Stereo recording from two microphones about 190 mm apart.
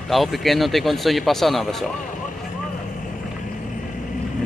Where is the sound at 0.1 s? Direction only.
Centre (ahead or behind).